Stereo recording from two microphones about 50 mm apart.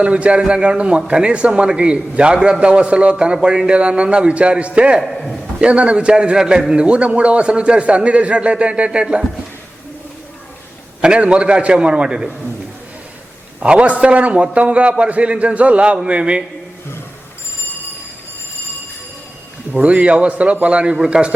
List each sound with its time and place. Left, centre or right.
0.0 s a man's voice: right
5.0 s a man's voice: centre
5.5 s a man's voice: right
11.0 s a man's voice: right
13.6 s a man's voice: right
19.7 s a man's voice: right